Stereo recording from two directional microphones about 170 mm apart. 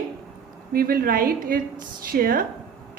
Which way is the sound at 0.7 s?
60° right (ahead or behind).